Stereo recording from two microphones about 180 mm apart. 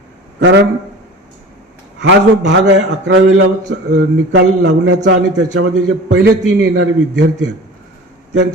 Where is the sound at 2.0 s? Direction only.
85° right.